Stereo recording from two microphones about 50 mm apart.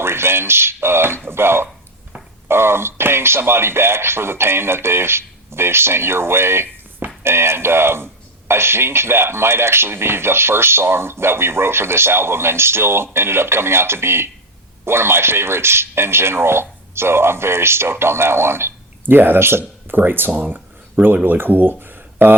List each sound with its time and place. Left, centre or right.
0.0 s speech: right
20.0 s speech: right